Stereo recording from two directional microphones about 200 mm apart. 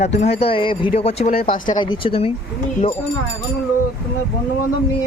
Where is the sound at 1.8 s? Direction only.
25° left (ahead or behind).